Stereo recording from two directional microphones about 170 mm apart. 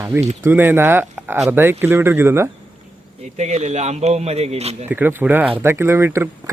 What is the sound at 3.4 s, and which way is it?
Speech, 40° right (ahead or behind).